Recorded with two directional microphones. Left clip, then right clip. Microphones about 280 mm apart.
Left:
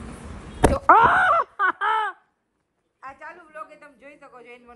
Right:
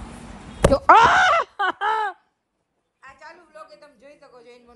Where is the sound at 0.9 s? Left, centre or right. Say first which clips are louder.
Right 2 dB; right.